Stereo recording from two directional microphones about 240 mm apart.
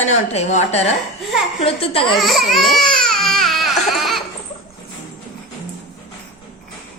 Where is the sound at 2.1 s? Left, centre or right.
Centre.